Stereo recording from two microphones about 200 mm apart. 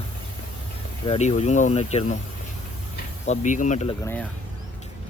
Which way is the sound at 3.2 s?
35° left (ahead or behind).